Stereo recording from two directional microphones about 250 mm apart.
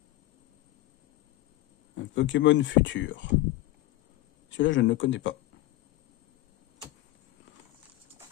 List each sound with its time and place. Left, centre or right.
2.0 s speech: left
4.5 s speech: left